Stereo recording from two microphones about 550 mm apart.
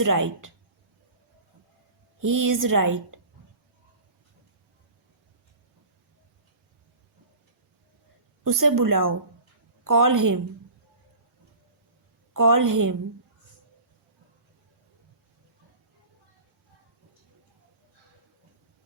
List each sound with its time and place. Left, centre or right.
0.0 s a woman's voice: right
2.2 s a woman's voice: right
8.4 s a woman's voice: right
12.3 s a woman's voice: right